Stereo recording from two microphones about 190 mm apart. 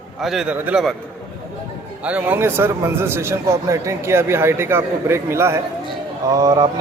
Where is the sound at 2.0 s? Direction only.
10° right (ahead or behind).